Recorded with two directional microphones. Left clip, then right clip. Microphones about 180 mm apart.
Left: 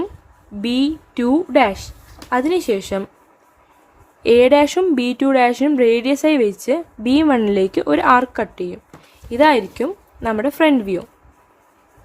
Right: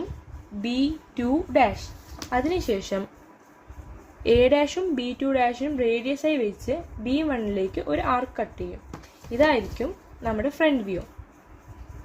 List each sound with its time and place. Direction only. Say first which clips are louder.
0.6 s speech: left 7 dB; 45° left (ahead or behind)
4.2 s speech: left 8 dB; 30° left (ahead or behind)